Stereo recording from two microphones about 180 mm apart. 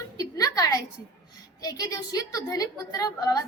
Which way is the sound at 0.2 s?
20° left (ahead or behind).